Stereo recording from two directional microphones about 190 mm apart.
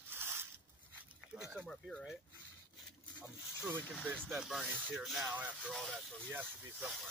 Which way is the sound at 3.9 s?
5° right (ahead or behind).